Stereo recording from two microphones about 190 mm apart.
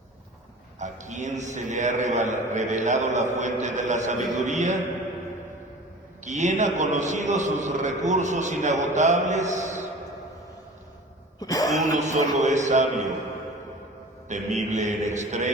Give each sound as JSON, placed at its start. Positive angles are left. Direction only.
{"t": 0.8, "sound": "a man's voice", "side_deg": -40}
{"t": 6.2, "sound": "a man's voice", "side_deg": -40}
{"t": 11.3, "sound": "speech", "side_deg": 20}
{"t": 11.8, "sound": "a man's voice", "side_deg": -40}
{"t": 14.3, "sound": "a man's voice", "side_deg": -40}